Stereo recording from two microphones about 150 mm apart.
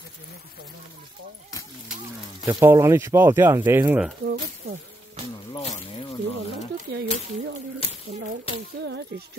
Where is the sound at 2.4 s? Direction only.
20° right (ahead or behind).